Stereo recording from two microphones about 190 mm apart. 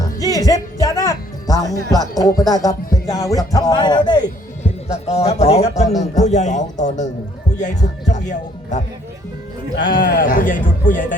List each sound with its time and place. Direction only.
0.2 s speech: 20° left (ahead or behind)
4.6 s a man's voice: 35° left (ahead or behind)
8.1 s speech: 40° left (ahead or behind)
9.7 s speech: 70° left (ahead or behind)
10.2 s speech: 45° left (ahead or behind)